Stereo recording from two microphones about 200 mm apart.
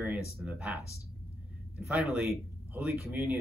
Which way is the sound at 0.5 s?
5° right (ahead or behind).